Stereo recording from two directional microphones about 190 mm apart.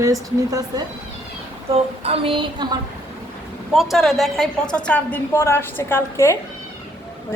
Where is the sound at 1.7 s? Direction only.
30° right (ahead or behind).